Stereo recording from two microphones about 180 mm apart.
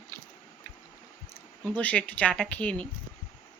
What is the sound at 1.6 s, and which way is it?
Speech, 10° left (ahead or behind).